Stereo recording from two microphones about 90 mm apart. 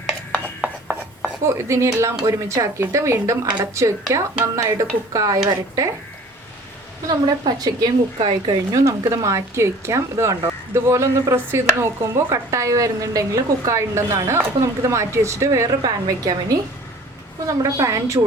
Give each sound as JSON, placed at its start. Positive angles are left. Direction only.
{"t": 0.3, "sound": "rub", "side_deg": 15}
{"t": 0.6, "sound": "ratchet", "side_deg": 0}
{"t": 1.5, "sound": "speech", "side_deg": -30}
{"t": 7.1, "sound": "a woman's voice", "side_deg": -45}
{"t": 8.8, "sound": "speech", "side_deg": -35}